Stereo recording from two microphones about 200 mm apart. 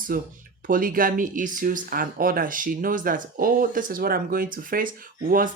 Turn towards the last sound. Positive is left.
turn(degrees=-45)  # may be behind; listen again after turning